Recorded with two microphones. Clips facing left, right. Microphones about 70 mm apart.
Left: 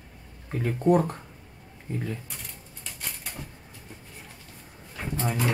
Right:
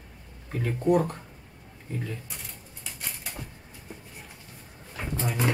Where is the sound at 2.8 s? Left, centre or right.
Centre.